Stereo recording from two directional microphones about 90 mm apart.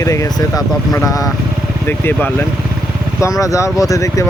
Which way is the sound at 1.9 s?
20° left (ahead or behind).